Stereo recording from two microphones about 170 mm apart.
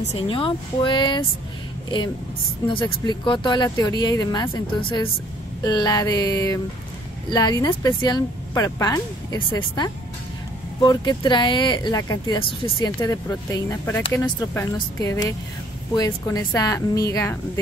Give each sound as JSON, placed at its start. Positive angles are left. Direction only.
{"t": 0.1, "sound": "speech", "side_deg": 30}
{"t": 2.7, "sound": "speech", "side_deg": 30}